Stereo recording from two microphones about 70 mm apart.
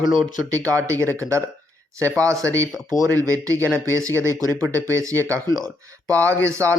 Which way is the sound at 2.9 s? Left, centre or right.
Right.